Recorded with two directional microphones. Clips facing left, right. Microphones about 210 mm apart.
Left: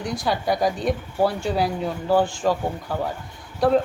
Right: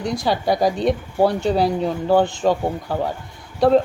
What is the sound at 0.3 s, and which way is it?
Speech, centre (ahead or behind).